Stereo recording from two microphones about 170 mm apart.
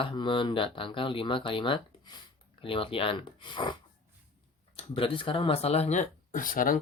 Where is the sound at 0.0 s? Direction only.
30° left (ahead or behind).